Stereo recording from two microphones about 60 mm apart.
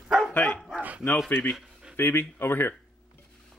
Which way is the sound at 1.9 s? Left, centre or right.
Left.